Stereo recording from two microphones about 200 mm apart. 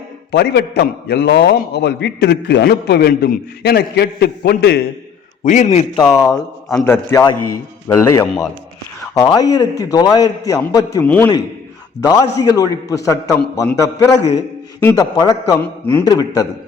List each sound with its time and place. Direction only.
0.3 s a man's voice: 55° left (ahead or behind)
5.5 s a man's voice: 35° left (ahead or behind)
6.0 s a man's voice: 15° left (ahead or behind)
12.4 s a man's voice: 20° left (ahead or behind)